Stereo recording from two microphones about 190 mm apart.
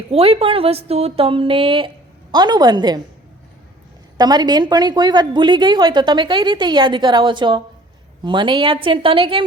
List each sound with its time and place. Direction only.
0.1 s a woman's voice: 30° right (ahead or behind)
4.2 s a woman's voice: 20° right (ahead or behind)